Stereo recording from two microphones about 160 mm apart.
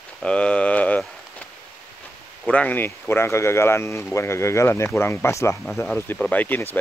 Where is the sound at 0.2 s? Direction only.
5° left (ahead or behind).